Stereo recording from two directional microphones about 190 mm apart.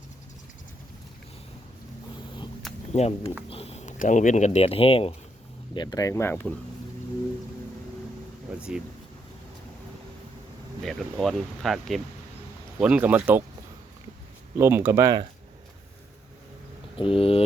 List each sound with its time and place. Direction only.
2.9 s speech: 35° left (ahead or behind); by 6.5 s 10° left (ahead or behind)
8.4 s a sound: 5° right (ahead or behind)
10.8 s speech: centre (ahead or behind)
14.6 s speech: 10° right (ahead or behind)
17.0 s speech: 30° left (ahead or behind)